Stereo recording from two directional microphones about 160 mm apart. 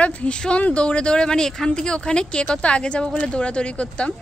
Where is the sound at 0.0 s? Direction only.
10° left (ahead or behind).